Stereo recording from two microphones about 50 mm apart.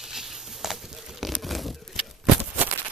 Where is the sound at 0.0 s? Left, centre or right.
Centre.